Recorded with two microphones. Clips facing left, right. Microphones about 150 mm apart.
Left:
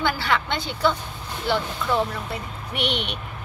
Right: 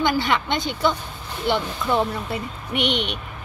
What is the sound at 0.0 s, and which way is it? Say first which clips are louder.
Speech: right 3 dB; 15° right (ahead or behind).